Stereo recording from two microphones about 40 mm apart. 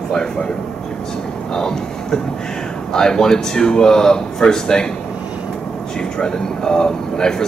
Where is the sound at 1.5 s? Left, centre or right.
Centre.